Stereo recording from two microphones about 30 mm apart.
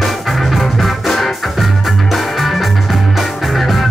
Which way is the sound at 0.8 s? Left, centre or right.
Centre.